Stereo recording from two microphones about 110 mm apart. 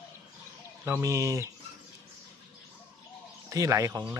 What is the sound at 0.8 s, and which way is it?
Speech, 25° right (ahead or behind).